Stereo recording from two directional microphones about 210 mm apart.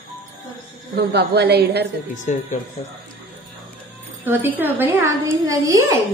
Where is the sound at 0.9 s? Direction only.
50° right (ahead or behind).